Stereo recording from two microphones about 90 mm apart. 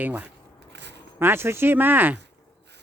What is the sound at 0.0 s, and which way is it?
A man's voice, 20° right (ahead or behind).